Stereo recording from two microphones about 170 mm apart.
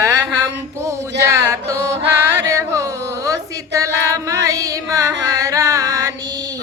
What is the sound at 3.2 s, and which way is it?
Female singing, 20° right (ahead or behind).